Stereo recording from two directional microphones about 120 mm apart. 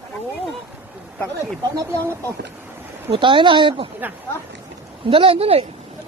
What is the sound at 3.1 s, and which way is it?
Speech, 45° right (ahead or behind).